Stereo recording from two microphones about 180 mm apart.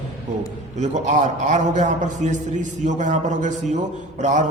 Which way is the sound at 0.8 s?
40° right (ahead or behind).